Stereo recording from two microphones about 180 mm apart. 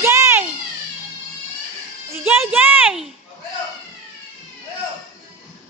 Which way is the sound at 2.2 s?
10° right (ahead or behind).